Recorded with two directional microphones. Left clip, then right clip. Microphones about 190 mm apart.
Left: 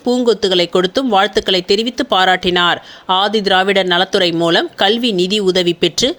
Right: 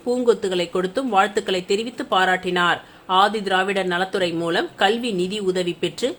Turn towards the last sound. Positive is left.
turn(degrees=35)  # may be behind; listen again after turning